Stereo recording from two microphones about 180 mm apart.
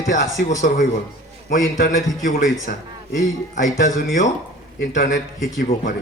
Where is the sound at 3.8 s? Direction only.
50° left (ahead or behind).